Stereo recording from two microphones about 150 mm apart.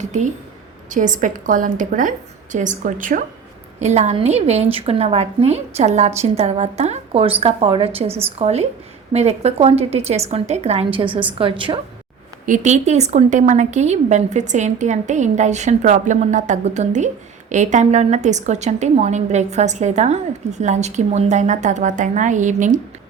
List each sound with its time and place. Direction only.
0.0 s a woman's voice: 50° right (ahead or behind)
3.8 s a woman's voice: 50° right (ahead or behind)
12.5 s a woman's voice: 50° right (ahead or behind)